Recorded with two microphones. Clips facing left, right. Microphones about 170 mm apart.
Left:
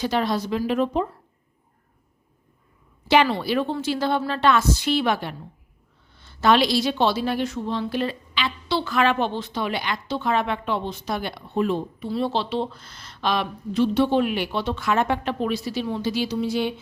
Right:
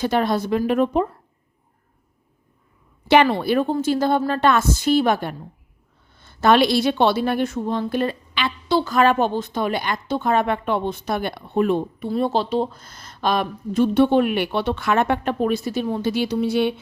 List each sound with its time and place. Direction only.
0.0 s a woman's voice: 55° right (ahead or behind)
3.1 s a woman's voice: 55° right (ahead or behind)